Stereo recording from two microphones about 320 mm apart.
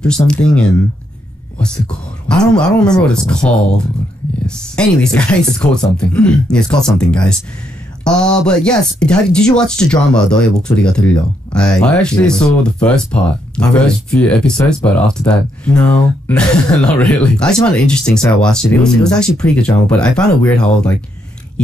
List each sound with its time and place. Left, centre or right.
0.0 s speech: centre
2.2 s speech: centre